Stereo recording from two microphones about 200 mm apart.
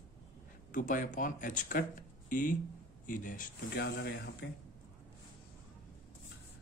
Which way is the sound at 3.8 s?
60° left (ahead or behind).